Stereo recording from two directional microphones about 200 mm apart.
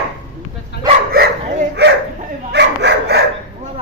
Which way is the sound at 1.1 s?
50° right (ahead or behind).